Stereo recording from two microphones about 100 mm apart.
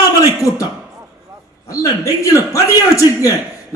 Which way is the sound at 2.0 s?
35° left (ahead or behind).